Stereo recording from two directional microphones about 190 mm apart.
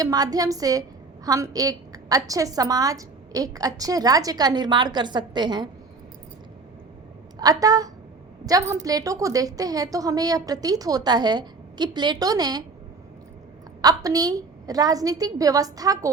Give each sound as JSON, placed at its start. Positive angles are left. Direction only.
{"t": 0.0, "sound": "a woman's voice", "side_deg": -20}
{"t": 7.3, "sound": "a woman's voice", "side_deg": -20}
{"t": 13.8, "sound": "a woman's voice", "side_deg": -20}